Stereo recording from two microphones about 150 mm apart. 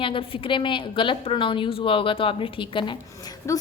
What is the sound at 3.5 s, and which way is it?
Speech, 20° left (ahead or behind).